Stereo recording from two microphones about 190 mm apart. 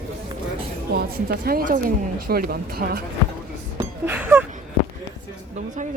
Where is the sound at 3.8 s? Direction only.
10° right (ahead or behind).